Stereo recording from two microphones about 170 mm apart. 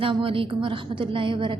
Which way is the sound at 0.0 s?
30° right (ahead or behind).